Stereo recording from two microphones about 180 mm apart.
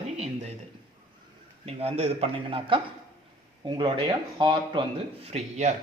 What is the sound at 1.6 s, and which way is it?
A man's voice, 35° right (ahead or behind).